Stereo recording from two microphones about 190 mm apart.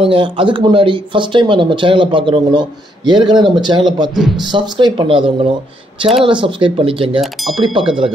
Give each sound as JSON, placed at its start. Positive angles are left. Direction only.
{"t": 0.0, "sound": "speech", "side_deg": -25}
{"t": 4.1, "sound": "speech", "side_deg": 0}
{"t": 4.5, "sound": "speech", "side_deg": -25}
{"t": 7.2, "sound": "speech", "side_deg": 0}